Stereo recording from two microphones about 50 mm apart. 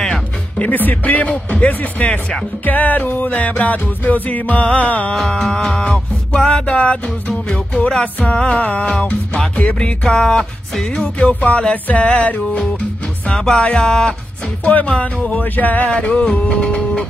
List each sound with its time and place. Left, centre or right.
0.6 s music: left
5.1 s music: centre; by 12.8 s left
13.3 s music: centre
14.6 s music: left
15.4 s music: left
15.9 s music: left